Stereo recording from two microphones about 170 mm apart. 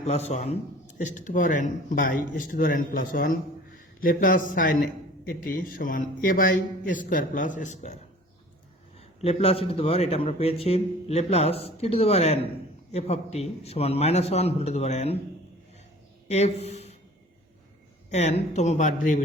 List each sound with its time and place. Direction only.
0.0 s a man's voice: 40° left (ahead or behind)
9.0 s a man's voice: 35° left (ahead or behind)
16.3 s speech: 40° left (ahead or behind)
18.1 s speech: 40° left (ahead or behind)